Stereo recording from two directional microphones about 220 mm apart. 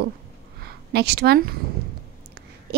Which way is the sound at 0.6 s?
50° right (ahead or behind).